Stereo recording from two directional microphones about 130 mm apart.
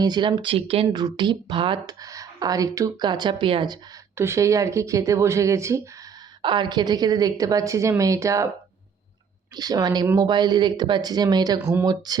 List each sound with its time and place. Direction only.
0.0 s speech: 35° right (ahead or behind)
1.0 s speech: 35° right (ahead or behind)
4.2 s a woman's voice: 20° right (ahead or behind)
6.4 s a woman's voice: 35° right (ahead or behind)
9.6 s speech: 30° right (ahead or behind)